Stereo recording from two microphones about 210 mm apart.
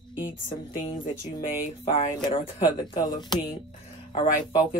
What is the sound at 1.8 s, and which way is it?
Speech, 25° left (ahead or behind).